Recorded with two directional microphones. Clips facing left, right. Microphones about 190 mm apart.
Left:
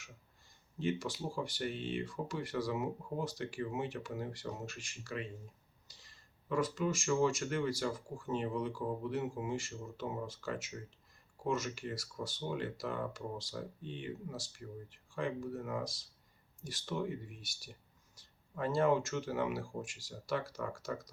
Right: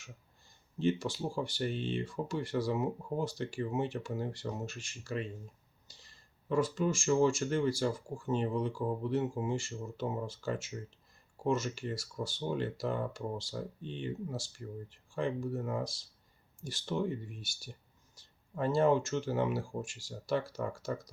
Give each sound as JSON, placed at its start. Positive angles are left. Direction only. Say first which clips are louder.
{"t": 0.8, "sound": "speech", "louder": "right 5 dB", "side_deg": -30}